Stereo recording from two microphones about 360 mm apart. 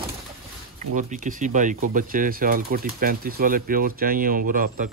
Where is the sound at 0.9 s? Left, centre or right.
Right.